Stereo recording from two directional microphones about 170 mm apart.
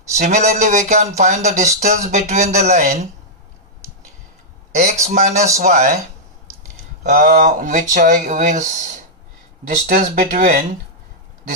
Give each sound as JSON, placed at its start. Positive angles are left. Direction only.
{"t": 0.1, "sound": "speech", "side_deg": -45}
{"t": 4.7, "sound": "speech", "side_deg": -45}
{"t": 7.0, "sound": "speech", "side_deg": -50}